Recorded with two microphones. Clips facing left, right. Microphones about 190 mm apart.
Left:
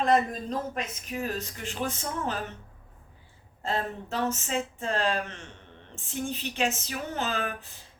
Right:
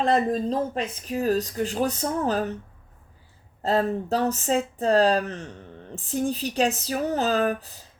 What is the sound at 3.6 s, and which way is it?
Speech, 40° right (ahead or behind).